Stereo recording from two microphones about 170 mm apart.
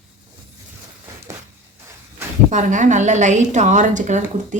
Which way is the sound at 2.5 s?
45° right (ahead or behind).